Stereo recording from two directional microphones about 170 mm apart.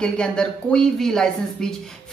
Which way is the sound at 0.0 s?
5° left (ahead or behind).